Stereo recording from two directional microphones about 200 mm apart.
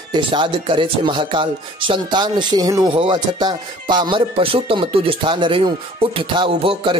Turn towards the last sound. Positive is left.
turn(degrees=-25)  # may be behind; listen again after turning